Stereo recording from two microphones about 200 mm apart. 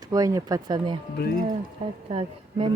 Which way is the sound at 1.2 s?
55° left (ahead or behind).